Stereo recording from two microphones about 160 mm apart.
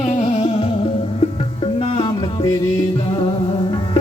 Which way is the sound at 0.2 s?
40° left (ahead or behind).